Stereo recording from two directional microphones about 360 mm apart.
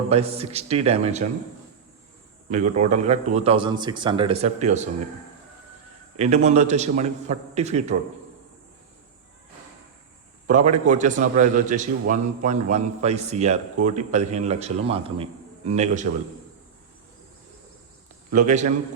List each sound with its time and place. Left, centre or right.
0.1 s a man's voice: centre
2.7 s a man's voice: centre
6.1 s a man's voice: centre
10.4 s a man's voice: centre
18.3 s a man's voice: centre